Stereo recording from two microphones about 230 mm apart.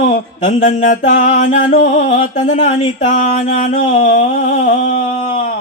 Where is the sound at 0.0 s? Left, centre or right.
Left.